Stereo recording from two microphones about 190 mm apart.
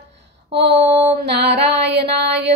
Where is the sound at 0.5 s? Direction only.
60° right (ahead or behind).